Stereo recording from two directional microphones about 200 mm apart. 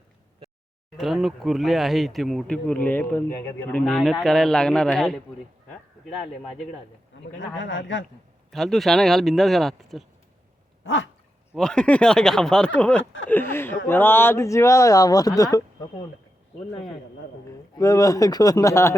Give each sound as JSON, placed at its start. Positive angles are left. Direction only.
{"t": 0.9, "sound": "speech", "side_deg": 0}
{"t": 7.3, "sound": "a man's voice", "side_deg": 70}
{"t": 8.4, "sound": "speech", "side_deg": 0}
{"t": 10.8, "sound": "dog", "side_deg": 75}
{"t": 11.5, "sound": "speech", "side_deg": 5}
{"t": 13.5, "sound": "a sound", "side_deg": 10}
{"t": 13.8, "sound": "speech", "side_deg": 10}
{"t": 17.7, "sound": "speech", "side_deg": 15}